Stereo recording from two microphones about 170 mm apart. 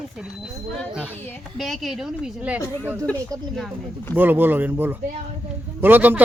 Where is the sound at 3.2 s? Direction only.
20° right (ahead or behind).